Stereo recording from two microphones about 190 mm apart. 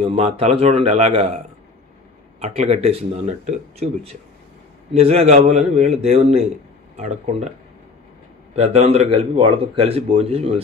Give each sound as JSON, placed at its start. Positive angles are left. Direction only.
{"t": 0.0, "sound": "speech", "side_deg": -30}
{"t": 2.4, "sound": "speech", "side_deg": -35}
{"t": 8.5, "sound": "speech", "side_deg": -35}